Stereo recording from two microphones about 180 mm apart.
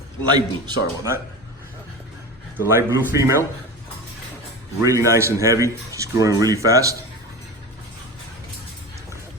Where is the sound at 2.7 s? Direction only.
15° right (ahead or behind).